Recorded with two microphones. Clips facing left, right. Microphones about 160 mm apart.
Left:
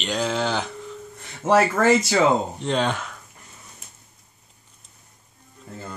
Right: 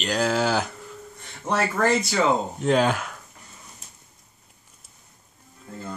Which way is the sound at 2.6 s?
5° right (ahead or behind).